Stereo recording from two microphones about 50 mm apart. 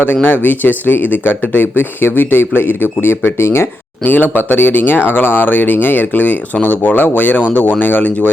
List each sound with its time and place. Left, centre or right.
0.0 s speech: left
4.0 s speech: left